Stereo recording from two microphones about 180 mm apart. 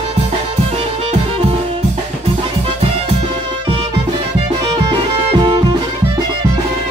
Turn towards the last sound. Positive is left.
turn(degrees=-25)  # may be behind; listen again after turning